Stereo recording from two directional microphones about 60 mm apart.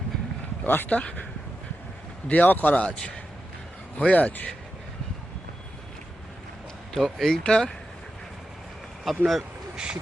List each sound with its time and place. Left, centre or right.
0.6 s speech: left
0.9 s speech: left
2.8 s a man's voice: centre
6.9 s speech: centre
9.0 s vehicle: centre